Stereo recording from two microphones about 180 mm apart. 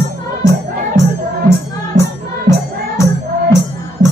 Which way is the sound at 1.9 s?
45° right (ahead or behind).